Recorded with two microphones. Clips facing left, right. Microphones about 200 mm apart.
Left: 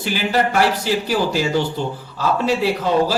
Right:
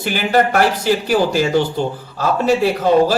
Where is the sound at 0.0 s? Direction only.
55° right (ahead or behind).